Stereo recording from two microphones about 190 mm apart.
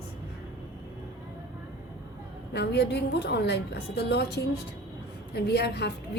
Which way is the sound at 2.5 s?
65° left (ahead or behind).